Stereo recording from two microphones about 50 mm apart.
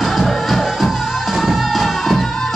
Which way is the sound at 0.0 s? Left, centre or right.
Centre.